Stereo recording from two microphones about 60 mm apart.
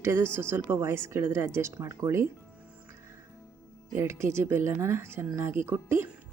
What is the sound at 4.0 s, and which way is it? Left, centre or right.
A woman's voice, right.